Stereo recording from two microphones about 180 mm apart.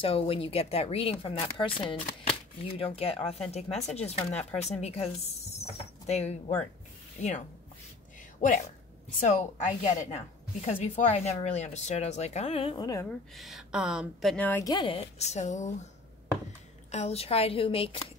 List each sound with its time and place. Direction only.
0.0 s a woman's voice: 30° left (ahead or behind)
13.4 s speech: centre (ahead or behind)
14.3 s speech: 10° left (ahead or behind)
14.7 s a woman's voice: 25° left (ahead or behind)
16.9 s a woman's voice: 35° left (ahead or behind)